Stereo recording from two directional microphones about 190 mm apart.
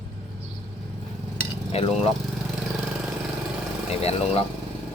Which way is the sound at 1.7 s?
30° left (ahead or behind).